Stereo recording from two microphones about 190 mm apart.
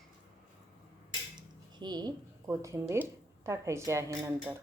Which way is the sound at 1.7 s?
25° right (ahead or behind).